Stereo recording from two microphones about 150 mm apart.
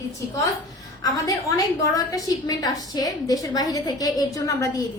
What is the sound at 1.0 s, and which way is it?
A woman's voice, 20° left (ahead or behind).